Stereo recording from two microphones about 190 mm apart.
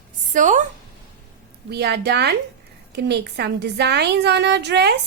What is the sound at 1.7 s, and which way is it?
A woman's voice, 60° right (ahead or behind).